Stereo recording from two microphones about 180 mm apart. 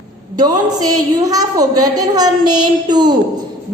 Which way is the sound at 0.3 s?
20° right (ahead or behind).